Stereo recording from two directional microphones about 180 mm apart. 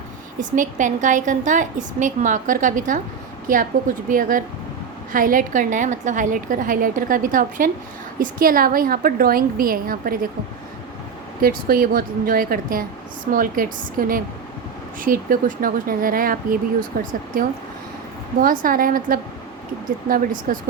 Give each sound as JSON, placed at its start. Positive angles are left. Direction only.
{"t": 0.3, "sound": "a woman's voice", "side_deg": -45}
{"t": 11.4, "sound": "a woman's voice", "side_deg": -55}
{"t": 18.4, "sound": "a woman's voice", "side_deg": -50}